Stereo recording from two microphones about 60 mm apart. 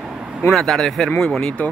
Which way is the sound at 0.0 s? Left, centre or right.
Centre.